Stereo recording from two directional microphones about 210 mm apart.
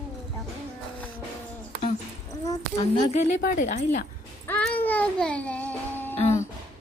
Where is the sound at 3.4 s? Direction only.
40° left (ahead or behind).